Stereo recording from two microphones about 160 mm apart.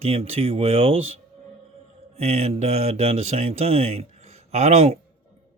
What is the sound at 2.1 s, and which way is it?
Speech, 40° right (ahead or behind).